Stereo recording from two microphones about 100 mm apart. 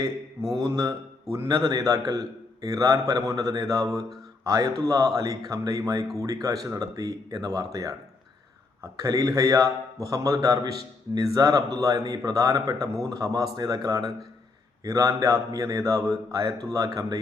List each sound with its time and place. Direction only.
0.5 s a man's voice: 40° right (ahead or behind)